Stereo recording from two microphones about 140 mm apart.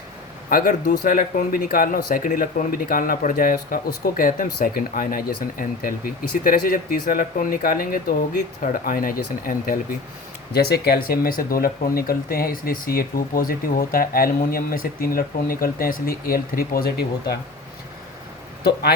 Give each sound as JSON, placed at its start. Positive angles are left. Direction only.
{"t": 0.5, "sound": "speech", "side_deg": 80}